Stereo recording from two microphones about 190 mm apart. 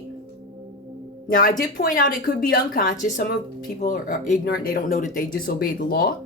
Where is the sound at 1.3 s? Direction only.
45° left (ahead or behind).